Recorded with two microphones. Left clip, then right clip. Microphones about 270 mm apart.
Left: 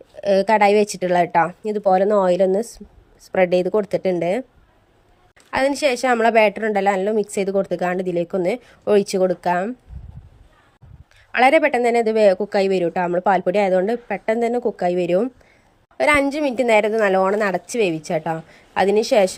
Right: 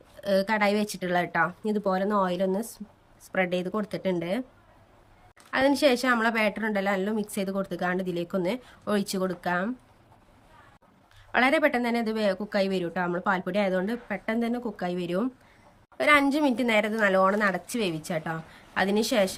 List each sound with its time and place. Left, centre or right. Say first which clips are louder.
0.2 s a woman's voice: left 9 dB; centre
5.5 s a woman's voice: left 4 dB; centre
11.3 s a woman's voice: left 8 dB; centre